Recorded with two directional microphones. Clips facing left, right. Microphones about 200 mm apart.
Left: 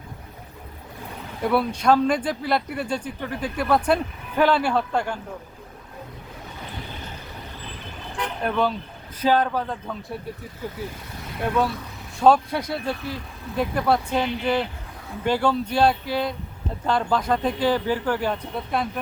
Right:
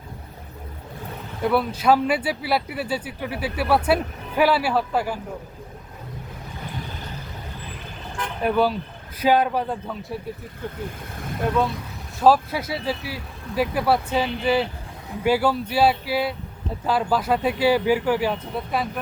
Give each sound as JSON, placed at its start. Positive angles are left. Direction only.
{"t": 1.4, "sound": "speech", "side_deg": 0}
{"t": 8.4, "sound": "speech", "side_deg": -5}
{"t": 10.0, "sound": "speech", "side_deg": 0}
{"t": 12.2, "sound": "speech", "side_deg": -5}